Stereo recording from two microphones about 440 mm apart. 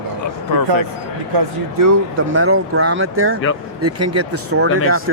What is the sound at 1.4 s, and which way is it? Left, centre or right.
Speech, right.